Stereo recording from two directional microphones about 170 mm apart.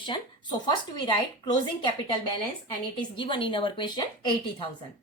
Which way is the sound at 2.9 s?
30° left (ahead or behind).